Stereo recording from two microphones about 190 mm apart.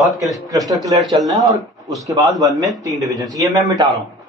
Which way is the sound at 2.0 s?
20° right (ahead or behind).